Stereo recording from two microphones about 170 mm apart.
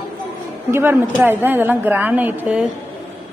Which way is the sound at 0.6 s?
15° right (ahead or behind).